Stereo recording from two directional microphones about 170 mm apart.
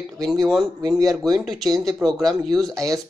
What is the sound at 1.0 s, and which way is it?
Speech, 20° right (ahead or behind).